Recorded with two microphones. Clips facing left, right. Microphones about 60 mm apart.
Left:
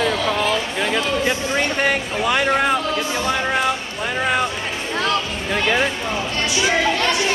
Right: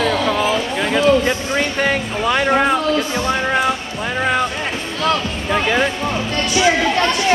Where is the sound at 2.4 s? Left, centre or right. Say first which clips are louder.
Right 4 dB; centre.